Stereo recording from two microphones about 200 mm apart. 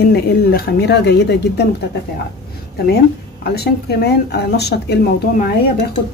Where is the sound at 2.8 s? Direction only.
55° left (ahead or behind).